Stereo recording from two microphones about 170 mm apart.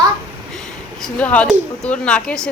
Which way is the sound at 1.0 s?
5° left (ahead or behind).